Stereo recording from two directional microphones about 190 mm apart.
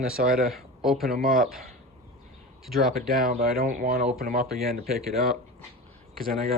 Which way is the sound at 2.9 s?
50° right (ahead or behind).